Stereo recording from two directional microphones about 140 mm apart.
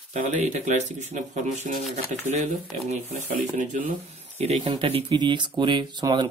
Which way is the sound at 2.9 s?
60° right (ahead or behind).